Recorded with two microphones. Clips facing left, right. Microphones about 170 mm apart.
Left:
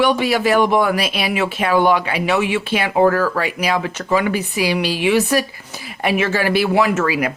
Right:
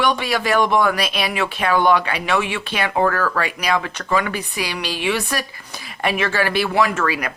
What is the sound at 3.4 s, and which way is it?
Speech, 10° left (ahead or behind).